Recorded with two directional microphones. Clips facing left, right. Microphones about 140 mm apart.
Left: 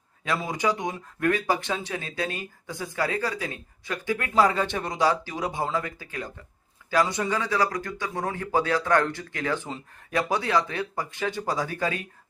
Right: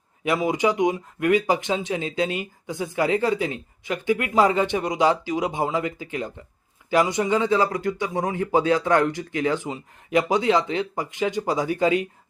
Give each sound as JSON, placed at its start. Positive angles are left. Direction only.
{"t": 0.3, "sound": "speech", "side_deg": -15}